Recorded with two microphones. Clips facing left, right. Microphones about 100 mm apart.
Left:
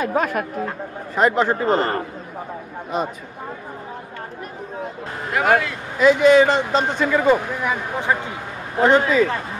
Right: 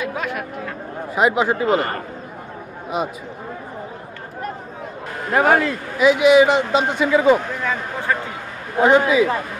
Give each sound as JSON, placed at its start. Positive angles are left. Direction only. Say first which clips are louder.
{"t": 0.0, "sound": "speech", "louder": "left 4 dB", "side_deg": 40}
{"t": 1.1, "sound": "a man's voice", "louder": "even", "side_deg": -10}
{"t": 5.3, "sound": "a man's voice", "louder": "right 2 dB", "side_deg": -35}
{"t": 5.9, "sound": "a man's voice", "louder": "even", "side_deg": -10}
{"t": 7.3, "sound": "speech", "louder": "even", "side_deg": 15}
{"t": 8.7, "sound": "a man's voice", "louder": "right 1 dB", "side_deg": -5}